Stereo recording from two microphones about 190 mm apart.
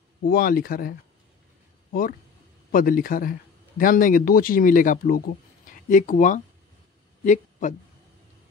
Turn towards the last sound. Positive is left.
turn(degrees=40)  # may be behind; listen again after turning